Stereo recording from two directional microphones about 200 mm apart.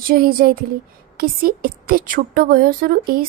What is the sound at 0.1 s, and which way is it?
A woman's voice, 45° right (ahead or behind).